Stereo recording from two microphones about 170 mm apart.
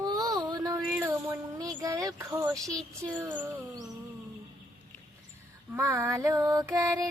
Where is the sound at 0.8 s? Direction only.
10° right (ahead or behind).